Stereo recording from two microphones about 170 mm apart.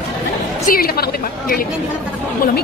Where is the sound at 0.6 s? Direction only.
60° left (ahead or behind).